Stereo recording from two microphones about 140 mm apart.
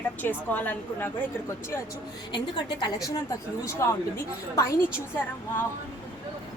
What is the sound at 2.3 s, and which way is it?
A woman's voice, 30° left (ahead or behind).